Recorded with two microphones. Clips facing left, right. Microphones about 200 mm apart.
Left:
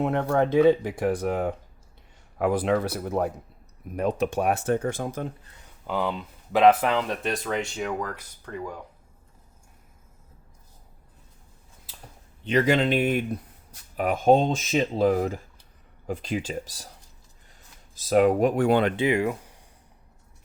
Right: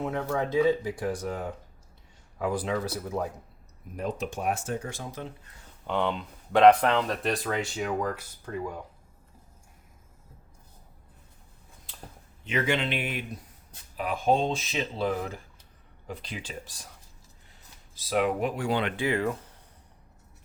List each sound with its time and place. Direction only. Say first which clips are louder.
0.0 s speech: left 6 dB; 65° left (ahead or behind)
5.8 s speech: left 1 dB; 5° left (ahead or behind)
12.5 s speech: left 6 dB; 35° left (ahead or behind)
17.9 s speech: left 7 dB; 45° left (ahead or behind)
18.9 s speech: left 4 dB; 15° left (ahead or behind)